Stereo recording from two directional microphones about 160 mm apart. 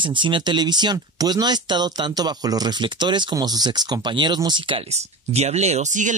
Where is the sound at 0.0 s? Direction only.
30° right (ahead or behind).